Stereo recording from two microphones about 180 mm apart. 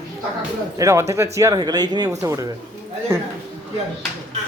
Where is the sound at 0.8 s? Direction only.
15° right (ahead or behind).